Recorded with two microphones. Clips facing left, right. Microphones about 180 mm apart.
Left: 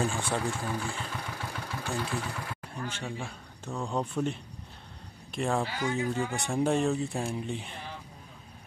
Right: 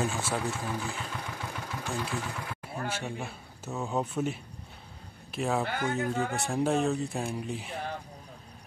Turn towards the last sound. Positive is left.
turn(degrees=0)  # may be behind; listen again after turning